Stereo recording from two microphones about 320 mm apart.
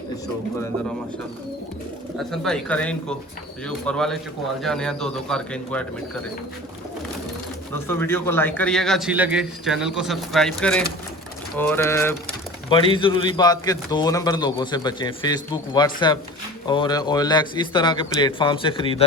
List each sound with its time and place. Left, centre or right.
2.1 s a man's voice: centre
7.7 s a man's voice: centre